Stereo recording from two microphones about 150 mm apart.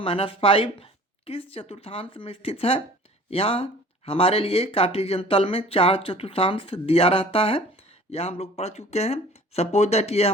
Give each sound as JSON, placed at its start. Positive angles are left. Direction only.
{"t": 0.0, "sound": "speech", "side_deg": 40}